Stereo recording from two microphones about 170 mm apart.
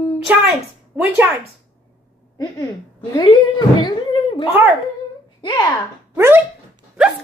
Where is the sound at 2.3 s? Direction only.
20° left (ahead or behind).